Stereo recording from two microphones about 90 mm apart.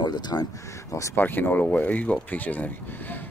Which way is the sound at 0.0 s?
50° left (ahead or behind).